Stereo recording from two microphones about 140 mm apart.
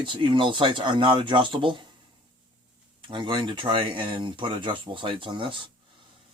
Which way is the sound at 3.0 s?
35° right (ahead or behind).